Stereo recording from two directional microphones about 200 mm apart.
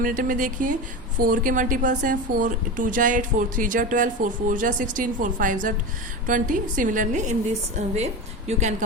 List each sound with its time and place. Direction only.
0.0 s speech: 45° right (ahead or behind)